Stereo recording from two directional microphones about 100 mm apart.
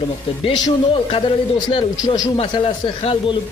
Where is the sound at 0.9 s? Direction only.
60° left (ahead or behind).